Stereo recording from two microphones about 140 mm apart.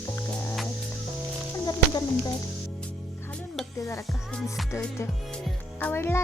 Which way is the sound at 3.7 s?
20° left (ahead or behind).